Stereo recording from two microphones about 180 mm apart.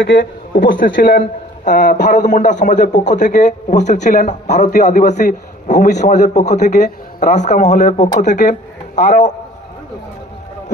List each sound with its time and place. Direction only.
0.0 s a man's voice: 50° left (ahead or behind)